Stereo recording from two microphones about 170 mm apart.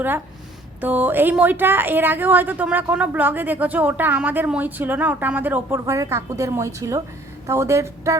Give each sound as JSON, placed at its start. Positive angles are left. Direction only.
{"t": 0.8, "sound": "a woman's voice", "side_deg": -10}